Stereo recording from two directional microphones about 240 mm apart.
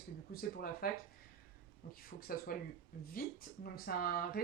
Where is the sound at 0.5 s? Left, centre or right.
Left.